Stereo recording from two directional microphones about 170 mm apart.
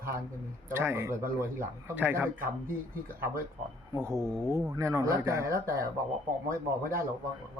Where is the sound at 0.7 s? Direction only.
15° right (ahead or behind).